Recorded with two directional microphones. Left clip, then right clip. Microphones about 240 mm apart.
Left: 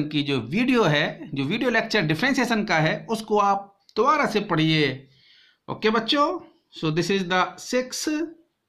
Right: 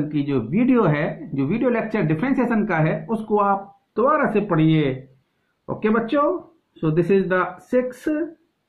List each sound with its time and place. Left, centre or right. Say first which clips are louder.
0.1 s speech: right 2 dB; left